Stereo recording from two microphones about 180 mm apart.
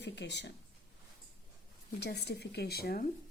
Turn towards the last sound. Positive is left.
turn(degrees=60)  # may be behind; listen again after turning